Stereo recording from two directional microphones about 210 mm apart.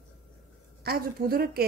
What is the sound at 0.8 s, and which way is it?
Speech, 45° right (ahead or behind).